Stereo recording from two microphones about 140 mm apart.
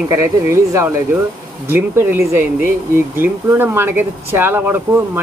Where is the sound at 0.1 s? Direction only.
20° right (ahead or behind).